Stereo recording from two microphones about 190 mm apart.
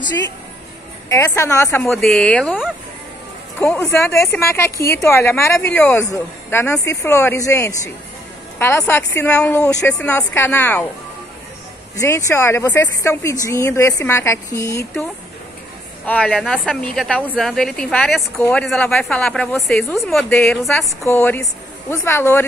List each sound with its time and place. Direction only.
1.0 s speech: 15° left (ahead or behind)
1.8 s a woman's voice: 5° left (ahead or behind)
3.5 s speech: 10° left (ahead or behind)
12.0 s speech: 15° left (ahead or behind)
16.1 s a woman's voice: 5° left (ahead or behind)